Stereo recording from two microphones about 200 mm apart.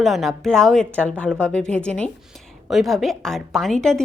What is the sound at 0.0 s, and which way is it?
A woman's voice, centre (ahead or behind).